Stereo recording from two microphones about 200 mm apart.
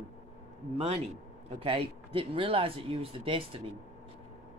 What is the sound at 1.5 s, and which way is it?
Speech, 30° right (ahead or behind).